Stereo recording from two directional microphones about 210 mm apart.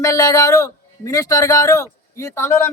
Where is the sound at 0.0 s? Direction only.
15° left (ahead or behind).